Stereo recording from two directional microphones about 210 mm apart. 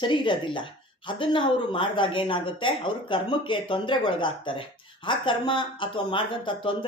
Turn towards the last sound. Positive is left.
turn(degrees=25)  # may be behind; listen again after turning